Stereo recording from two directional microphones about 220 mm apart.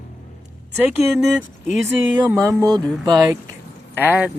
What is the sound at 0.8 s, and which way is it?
Speech, centre (ahead or behind).